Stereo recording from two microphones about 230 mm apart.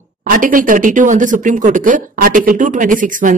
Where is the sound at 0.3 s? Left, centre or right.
Right.